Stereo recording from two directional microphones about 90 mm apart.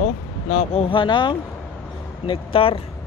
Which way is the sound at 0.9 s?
70° left (ahead or behind).